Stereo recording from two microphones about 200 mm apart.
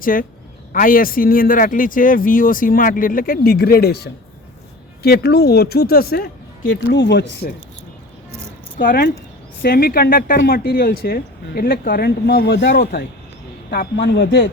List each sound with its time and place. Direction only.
0.0 s speech: 45° left (ahead or behind)
8.8 s a man's voice: 45° left (ahead or behind); by 14.5 s 60° left (ahead or behind)